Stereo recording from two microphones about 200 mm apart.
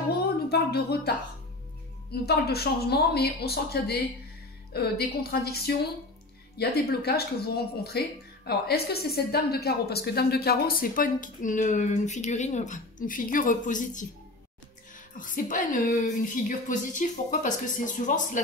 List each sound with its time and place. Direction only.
0.5 s a woman's voice: 50° left (ahead or behind)
15.1 s a woman's voice: 40° left (ahead or behind)